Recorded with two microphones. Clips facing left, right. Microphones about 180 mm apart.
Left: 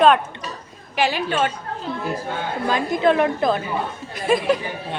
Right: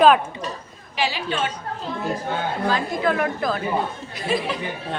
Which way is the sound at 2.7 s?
25° left (ahead or behind).